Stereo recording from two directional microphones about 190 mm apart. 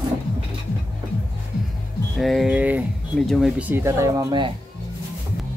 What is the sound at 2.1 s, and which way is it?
Speech, centre (ahead or behind).